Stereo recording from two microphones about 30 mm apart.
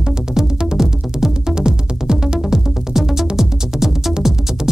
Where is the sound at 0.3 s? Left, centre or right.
Centre.